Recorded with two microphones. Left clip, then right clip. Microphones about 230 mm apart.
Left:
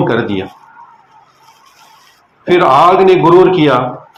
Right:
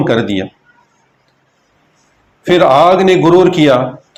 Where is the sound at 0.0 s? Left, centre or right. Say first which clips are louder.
Even; right.